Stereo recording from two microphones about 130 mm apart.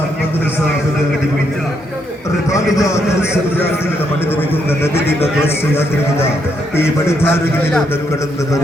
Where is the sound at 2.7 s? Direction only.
25° left (ahead or behind).